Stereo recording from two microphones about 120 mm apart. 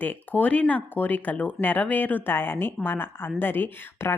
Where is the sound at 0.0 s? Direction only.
15° left (ahead or behind).